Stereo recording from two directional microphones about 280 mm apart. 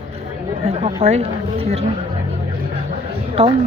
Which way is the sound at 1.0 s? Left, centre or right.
Right.